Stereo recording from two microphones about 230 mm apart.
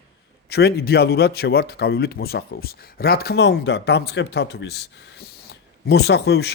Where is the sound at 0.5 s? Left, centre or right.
Left.